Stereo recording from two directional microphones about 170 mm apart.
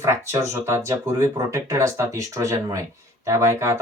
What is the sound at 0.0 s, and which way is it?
Speech, 15° right (ahead or behind).